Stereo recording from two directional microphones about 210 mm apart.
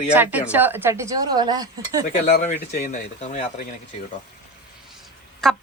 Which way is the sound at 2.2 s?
50° left (ahead or behind).